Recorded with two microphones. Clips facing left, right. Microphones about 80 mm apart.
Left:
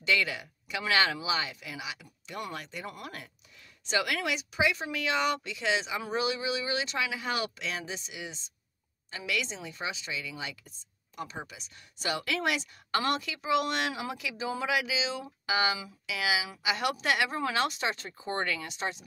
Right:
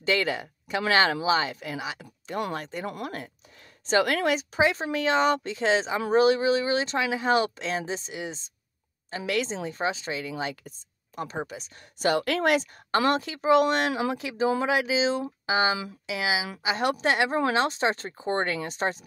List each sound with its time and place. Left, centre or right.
0.0 s speech: right